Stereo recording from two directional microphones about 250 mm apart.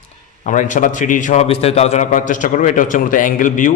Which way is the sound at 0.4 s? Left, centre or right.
Left.